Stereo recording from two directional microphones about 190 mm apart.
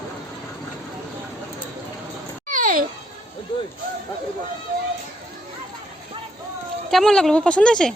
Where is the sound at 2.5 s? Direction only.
45° right (ahead or behind).